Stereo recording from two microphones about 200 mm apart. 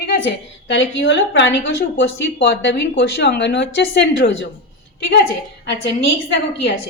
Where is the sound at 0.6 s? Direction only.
65° left (ahead or behind).